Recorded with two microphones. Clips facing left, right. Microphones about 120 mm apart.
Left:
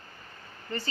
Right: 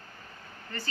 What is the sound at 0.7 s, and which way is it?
Speech, 20° left (ahead or behind).